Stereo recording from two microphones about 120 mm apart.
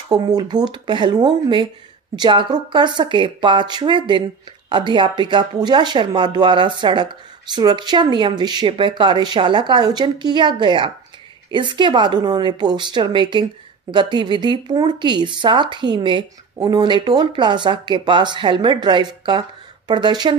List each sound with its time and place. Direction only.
0.1 s speech: 35° right (ahead or behind)